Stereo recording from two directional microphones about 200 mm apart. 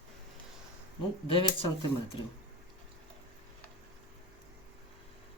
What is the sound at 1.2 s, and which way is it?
Speech, 25° left (ahead or behind).